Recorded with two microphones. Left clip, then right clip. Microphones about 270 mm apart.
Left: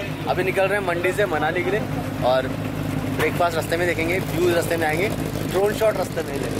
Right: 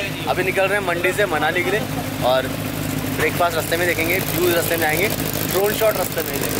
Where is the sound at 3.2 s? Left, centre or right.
Centre.